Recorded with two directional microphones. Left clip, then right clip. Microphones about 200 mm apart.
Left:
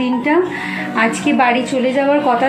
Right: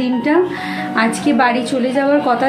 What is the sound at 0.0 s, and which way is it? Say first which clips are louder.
A woman's voice: even; 15° right (ahead or behind).